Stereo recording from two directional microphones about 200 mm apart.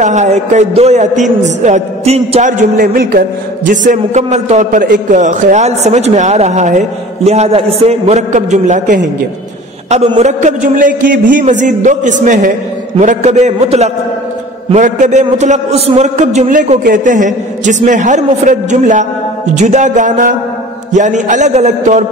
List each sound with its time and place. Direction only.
0.0 s a man's voice: 35° right (ahead or behind)